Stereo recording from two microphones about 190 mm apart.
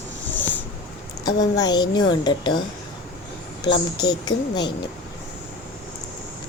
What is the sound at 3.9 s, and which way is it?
Speech, 20° left (ahead or behind).